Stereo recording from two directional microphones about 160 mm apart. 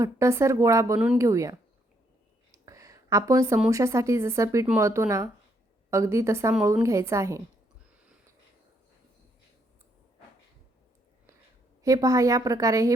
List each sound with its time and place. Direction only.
0.0 s a woman's voice: 15° right (ahead or behind)
2.5 s a sound: 20° right (ahead or behind)
3.7 s a woman's voice: 20° right (ahead or behind)
11.8 s a woman's voice: 20° right (ahead or behind)